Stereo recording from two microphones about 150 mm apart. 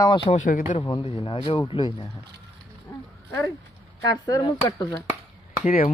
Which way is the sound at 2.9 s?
20° left (ahead or behind).